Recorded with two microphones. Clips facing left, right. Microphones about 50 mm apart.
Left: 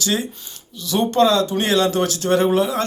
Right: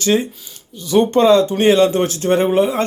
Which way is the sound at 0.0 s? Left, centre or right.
Right.